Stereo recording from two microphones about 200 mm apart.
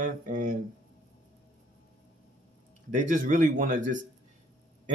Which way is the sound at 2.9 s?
40° right (ahead or behind).